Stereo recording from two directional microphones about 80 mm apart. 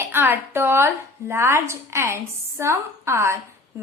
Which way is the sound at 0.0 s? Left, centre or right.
Right.